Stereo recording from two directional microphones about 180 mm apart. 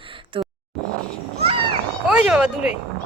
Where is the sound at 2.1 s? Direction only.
5° right (ahead or behind).